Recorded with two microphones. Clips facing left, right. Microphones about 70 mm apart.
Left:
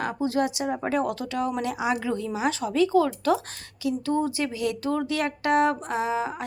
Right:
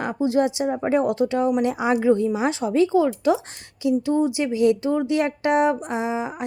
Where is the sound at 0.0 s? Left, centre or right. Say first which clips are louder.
Right 4 dB; right.